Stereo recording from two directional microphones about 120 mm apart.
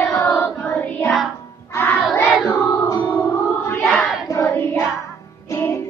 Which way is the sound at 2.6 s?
25° left (ahead or behind).